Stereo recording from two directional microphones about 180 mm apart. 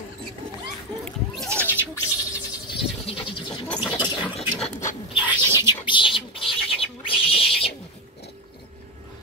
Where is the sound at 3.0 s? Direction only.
30° left (ahead or behind).